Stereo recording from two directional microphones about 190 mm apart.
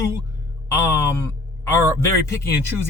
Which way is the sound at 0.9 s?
15° left (ahead or behind).